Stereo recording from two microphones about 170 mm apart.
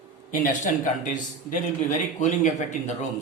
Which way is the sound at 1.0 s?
45° left (ahead or behind).